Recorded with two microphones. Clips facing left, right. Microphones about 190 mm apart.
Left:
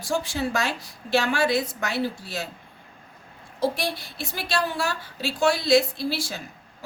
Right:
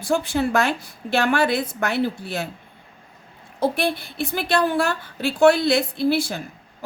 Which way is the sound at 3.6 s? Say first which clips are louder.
Right 4 dB; 55° right (ahead or behind).